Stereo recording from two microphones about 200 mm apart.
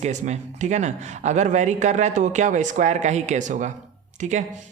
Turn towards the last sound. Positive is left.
turn(degrees=-35)  # may be behind; listen again after turning